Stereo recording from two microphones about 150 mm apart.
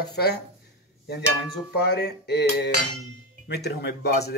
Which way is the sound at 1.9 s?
90° left.